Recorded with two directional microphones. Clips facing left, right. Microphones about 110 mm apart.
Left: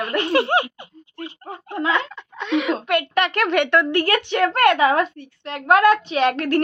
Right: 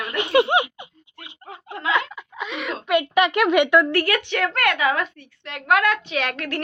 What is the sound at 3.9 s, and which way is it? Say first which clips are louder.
A woman's voice: left 2 dB; 25° left (ahead or behind).